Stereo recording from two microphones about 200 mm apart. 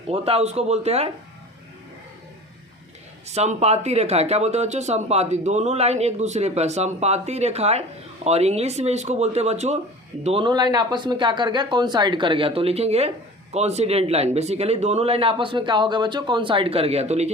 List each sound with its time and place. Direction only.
0.1 s speech: 30° right (ahead or behind)
3.2 s speech: 35° right (ahead or behind)